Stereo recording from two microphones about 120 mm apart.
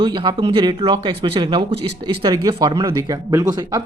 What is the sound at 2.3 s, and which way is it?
Speech, 30° right (ahead or behind).